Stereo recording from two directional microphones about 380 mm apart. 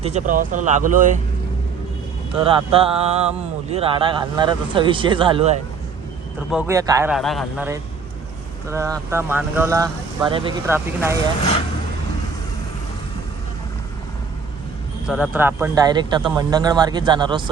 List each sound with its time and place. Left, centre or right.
0.0 s speech: centre
2.3 s a man's voice: centre
15.0 s speech: centre